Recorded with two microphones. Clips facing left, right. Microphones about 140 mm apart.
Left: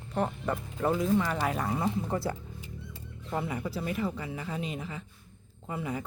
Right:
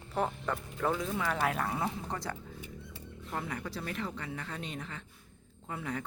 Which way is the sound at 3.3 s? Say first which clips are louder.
Left 5 dB; 10° left (ahead or behind).